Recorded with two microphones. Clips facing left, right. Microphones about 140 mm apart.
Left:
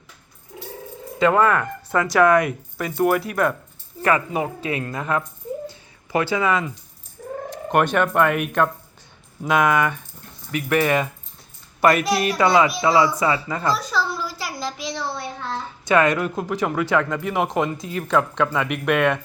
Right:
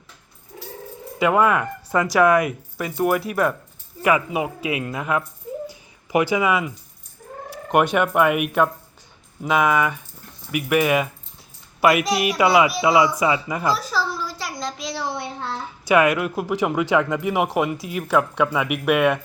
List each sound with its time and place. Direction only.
0.5 s cat: 5° left (ahead or behind)
1.2 s speech: 10° right (ahead or behind)
5.6 s a sound: 15° right (ahead or behind)
7.7 s a child's voice: 10° right (ahead or behind)
13.0 s speech: 15° right (ahead or behind)
13.7 s a sound: centre (ahead or behind)
14.9 s child singing: 15° right (ahead or behind)
15.8 s speech: 10° right (ahead or behind)